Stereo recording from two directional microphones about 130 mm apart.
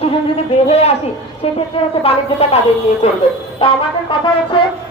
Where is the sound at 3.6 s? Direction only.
40° left (ahead or behind).